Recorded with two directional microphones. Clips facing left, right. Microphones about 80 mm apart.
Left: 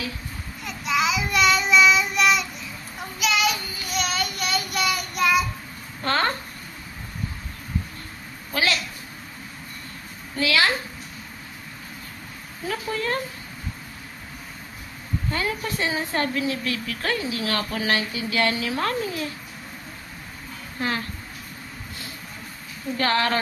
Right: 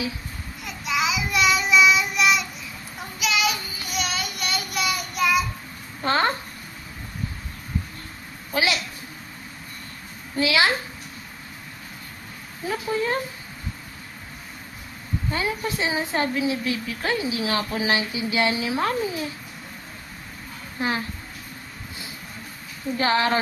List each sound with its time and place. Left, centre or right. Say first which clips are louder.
0.7 s child singing: left 2 dB; centre
6.0 s a sound: right 2 dB; centre
8.5 s a woman's voice: right 1 dB; centre
10.3 s a woman's voice: right 1 dB; right
12.6 s a woman's voice: right 2 dB; centre
15.3 s a woman's voice: right 1 dB; centre
20.8 s a woman's voice: right 1 dB; centre
22.9 s a woman's voice: right 1 dB; centre